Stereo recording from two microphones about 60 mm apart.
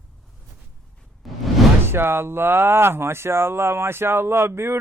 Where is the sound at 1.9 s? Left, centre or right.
Right.